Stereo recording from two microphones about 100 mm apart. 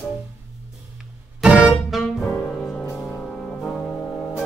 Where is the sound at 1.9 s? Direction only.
Centre (ahead or behind).